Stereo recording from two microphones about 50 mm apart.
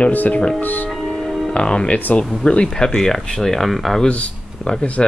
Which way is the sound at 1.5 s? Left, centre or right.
Left.